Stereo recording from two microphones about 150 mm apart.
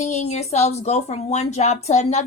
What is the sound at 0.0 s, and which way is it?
A woman's voice, 50° left (ahead or behind).